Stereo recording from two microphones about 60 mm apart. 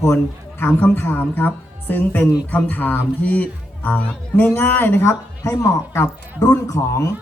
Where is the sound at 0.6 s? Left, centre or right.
Left.